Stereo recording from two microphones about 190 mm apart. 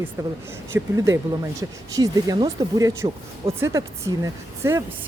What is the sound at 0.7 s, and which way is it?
A woman's voice, 15° right (ahead or behind).